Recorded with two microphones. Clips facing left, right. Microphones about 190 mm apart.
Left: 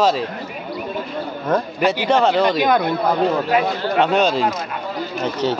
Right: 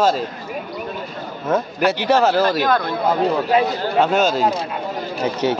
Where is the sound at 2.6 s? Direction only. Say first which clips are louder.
Left 2 dB; 15° left (ahead or behind).